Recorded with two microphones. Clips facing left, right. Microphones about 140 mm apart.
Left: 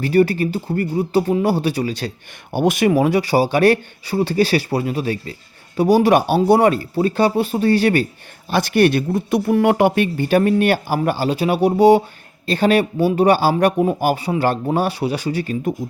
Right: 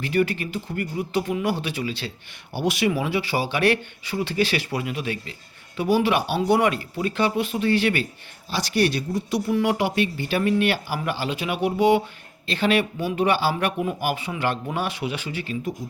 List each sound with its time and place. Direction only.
0.0 s speech: 40° left (ahead or behind)
8.4 s speech: 55° left (ahead or behind)